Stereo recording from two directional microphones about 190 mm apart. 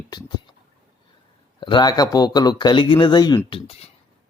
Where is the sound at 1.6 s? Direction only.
25° left (ahead or behind).